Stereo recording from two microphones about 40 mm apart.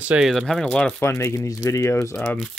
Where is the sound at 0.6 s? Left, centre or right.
Left.